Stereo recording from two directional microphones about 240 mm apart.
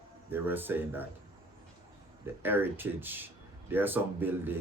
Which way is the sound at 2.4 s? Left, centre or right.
Centre.